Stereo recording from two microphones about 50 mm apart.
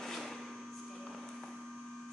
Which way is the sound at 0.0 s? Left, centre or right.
Centre.